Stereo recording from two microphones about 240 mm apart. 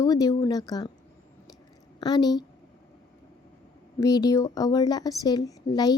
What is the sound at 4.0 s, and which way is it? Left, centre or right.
Speech, centre.